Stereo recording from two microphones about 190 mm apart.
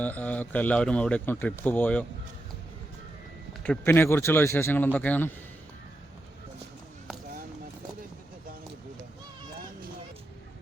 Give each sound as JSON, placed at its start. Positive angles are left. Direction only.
{"t": 0.0, "sound": "speech", "side_deg": 10}
{"t": 3.6, "sound": "speech", "side_deg": 10}